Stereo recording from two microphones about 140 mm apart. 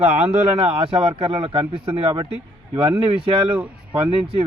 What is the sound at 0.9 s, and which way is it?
Speech, 40° right (ahead or behind).